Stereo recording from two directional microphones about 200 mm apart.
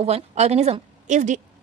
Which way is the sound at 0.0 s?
35° right (ahead or behind).